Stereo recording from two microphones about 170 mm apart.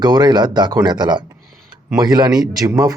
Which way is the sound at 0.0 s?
25° right (ahead or behind).